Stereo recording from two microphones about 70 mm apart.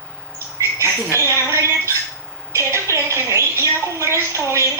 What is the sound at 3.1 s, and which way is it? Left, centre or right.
A woman's voice, right.